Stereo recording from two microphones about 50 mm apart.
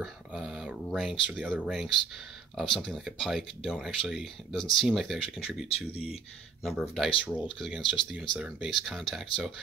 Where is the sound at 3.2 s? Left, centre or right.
Centre.